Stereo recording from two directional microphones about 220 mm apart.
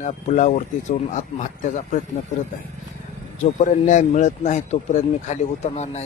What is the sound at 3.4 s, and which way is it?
A man's voice, 35° left (ahead or behind).